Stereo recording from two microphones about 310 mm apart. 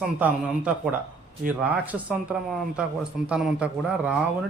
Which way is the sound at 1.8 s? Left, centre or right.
Centre.